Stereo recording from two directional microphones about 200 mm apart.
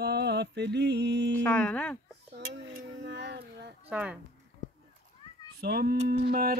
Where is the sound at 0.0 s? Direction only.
55° right (ahead or behind).